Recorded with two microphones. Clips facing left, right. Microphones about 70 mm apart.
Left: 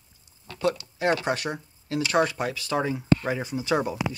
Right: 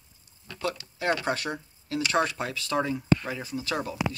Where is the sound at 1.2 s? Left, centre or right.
Left.